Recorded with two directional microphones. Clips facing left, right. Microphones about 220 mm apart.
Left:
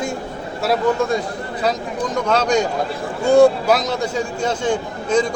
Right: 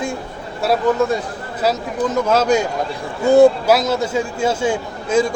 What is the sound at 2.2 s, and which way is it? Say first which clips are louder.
A man's voice: even; 5° right (ahead or behind).